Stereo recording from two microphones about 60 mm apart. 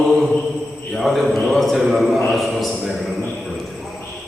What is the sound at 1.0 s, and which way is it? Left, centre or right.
A man's voice, centre.